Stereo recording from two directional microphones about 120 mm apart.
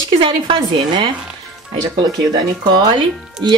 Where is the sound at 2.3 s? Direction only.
40° right (ahead or behind).